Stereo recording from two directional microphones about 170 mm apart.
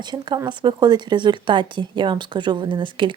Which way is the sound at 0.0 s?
25° right (ahead or behind).